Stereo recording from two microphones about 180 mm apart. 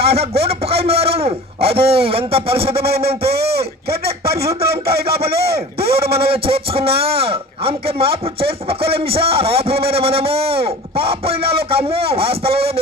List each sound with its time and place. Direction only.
0.0 s a man's voice: 35° right (ahead or behind)
2.6 s speech: 60° right (ahead or behind)
6.2 s a man's voice: 30° right (ahead or behind)